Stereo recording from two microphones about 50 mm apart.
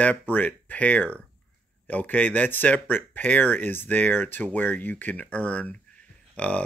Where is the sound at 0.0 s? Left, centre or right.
Left.